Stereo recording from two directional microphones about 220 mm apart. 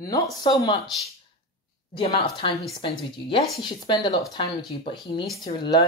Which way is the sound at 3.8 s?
20° left (ahead or behind).